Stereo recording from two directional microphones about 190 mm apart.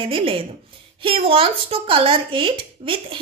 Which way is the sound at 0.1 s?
30° right (ahead or behind).